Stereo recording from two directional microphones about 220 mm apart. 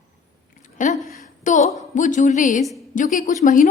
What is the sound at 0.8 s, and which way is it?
A woman's voice, 35° left (ahead or behind).